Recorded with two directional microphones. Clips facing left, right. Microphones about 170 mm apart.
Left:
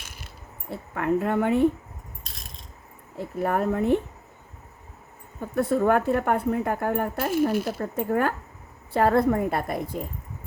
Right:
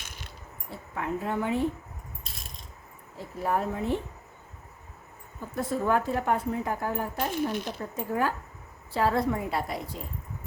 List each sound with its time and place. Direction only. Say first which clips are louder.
0.7 s speech: left 8 dB; 60° left (ahead or behind)
3.2 s speech: left 4 dB; 60° left (ahead or behind)
5.4 s speech: left 7 dB; 60° left (ahead or behind)
7.5 s speech: left 7 dB; 5° left (ahead or behind)
7.8 s a woman's voice: left 5 dB; 60° left (ahead or behind)